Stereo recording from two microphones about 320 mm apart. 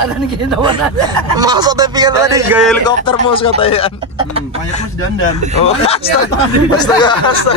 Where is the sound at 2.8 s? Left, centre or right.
Centre.